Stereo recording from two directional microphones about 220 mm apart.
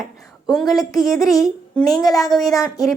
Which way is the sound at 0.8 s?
15° left (ahead or behind).